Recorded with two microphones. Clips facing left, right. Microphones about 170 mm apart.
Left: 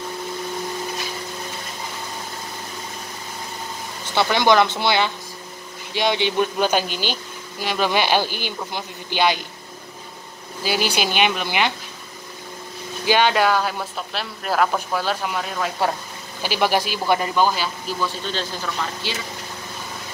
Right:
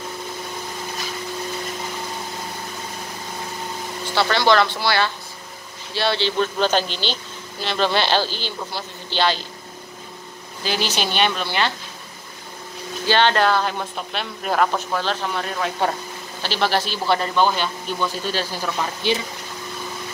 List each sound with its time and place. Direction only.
4.1 s speech: 20° left (ahead or behind)
10.6 s speech: 10° left (ahead or behind)
13.0 s speech: 10° left (ahead or behind)